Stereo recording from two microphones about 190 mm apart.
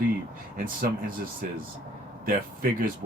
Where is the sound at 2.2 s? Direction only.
45° right (ahead or behind).